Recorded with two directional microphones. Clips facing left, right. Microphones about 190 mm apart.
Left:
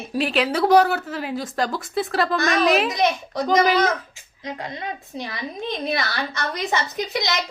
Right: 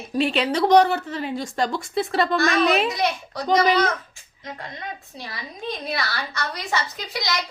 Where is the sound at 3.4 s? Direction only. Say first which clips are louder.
Left 1 dB; 5° left (ahead or behind).